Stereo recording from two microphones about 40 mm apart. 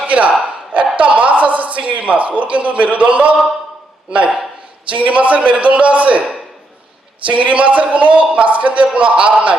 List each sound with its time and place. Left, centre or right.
0.0 s a sound: right
1.9 s a man's voice: right
4.9 s a man's voice: right
7.3 s a man's voice: right